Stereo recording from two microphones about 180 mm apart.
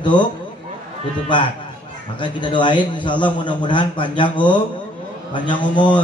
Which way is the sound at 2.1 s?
25° left (ahead or behind).